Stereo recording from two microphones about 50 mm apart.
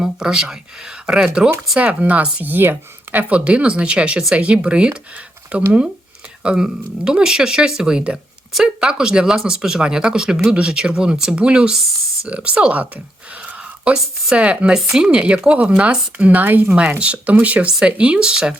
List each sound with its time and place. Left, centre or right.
0.0 s speech: centre
1.8 s speech: right
2.4 s speech: right
13.4 s a sound: right
14.3 s speech: right
14.7 s speech: centre
16.4 s speech: right
16.6 s speech: right